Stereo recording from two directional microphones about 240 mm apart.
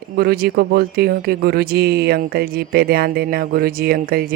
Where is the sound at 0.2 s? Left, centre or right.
Right.